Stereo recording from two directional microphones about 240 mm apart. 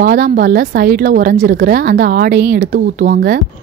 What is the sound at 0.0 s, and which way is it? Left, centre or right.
A woman's voice, right.